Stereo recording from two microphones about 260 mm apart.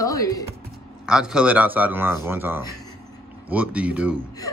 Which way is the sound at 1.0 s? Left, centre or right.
Centre.